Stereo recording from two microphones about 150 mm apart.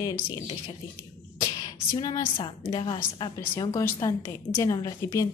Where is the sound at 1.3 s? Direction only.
25° left (ahead or behind).